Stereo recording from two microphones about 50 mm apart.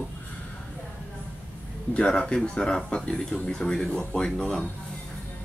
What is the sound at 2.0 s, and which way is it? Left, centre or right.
Speech, centre.